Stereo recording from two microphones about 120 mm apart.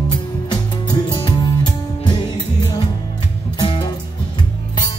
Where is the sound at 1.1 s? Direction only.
35° left (ahead or behind).